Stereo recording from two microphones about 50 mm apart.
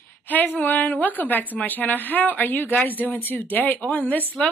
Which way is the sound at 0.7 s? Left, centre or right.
Left.